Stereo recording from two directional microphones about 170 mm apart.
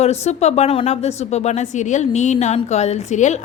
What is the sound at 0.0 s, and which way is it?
A woman's voice, 40° left (ahead or behind).